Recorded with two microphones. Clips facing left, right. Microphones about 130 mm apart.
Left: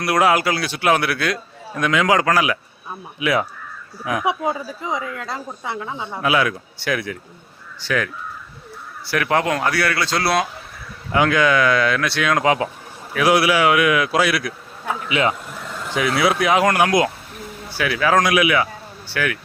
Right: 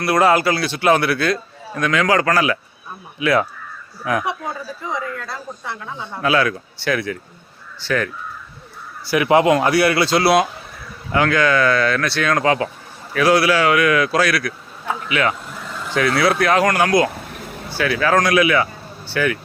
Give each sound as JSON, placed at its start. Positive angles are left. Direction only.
{"t": 0.0, "sound": "speech", "side_deg": 10}
{"t": 4.0, "sound": "a woman's voice", "side_deg": 5}
{"t": 4.3, "sound": "a woman's voice", "side_deg": 20}
{"t": 9.0, "sound": "a man's voice", "side_deg": -10}
{"t": 11.1, "sound": "speech", "side_deg": 15}
{"t": 15.8, "sound": "speech", "side_deg": 10}